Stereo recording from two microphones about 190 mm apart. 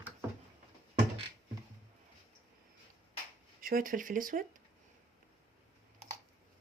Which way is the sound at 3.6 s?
50° right (ahead or behind).